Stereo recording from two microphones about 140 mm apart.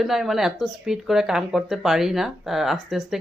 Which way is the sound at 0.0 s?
Centre (ahead or behind).